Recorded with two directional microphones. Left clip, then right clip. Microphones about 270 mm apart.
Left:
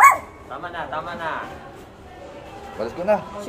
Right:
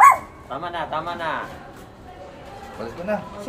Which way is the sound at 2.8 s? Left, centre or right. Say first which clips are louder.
Left 5 dB; left.